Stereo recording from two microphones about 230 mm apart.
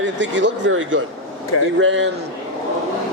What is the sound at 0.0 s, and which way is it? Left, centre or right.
A man's voice, right.